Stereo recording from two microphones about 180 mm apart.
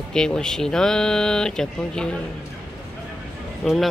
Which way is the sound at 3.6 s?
Centre (ahead or behind).